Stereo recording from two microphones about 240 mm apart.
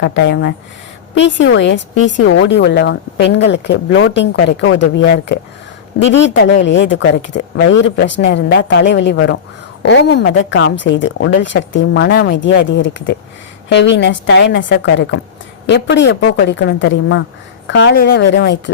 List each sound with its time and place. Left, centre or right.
0.0 s a woman's voice: left